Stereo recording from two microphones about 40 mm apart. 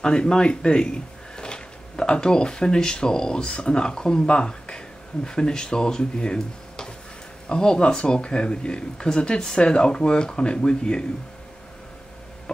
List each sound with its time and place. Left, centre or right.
0.0 s speech: left